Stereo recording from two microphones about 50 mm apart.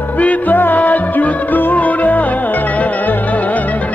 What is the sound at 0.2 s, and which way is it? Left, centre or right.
Music, left.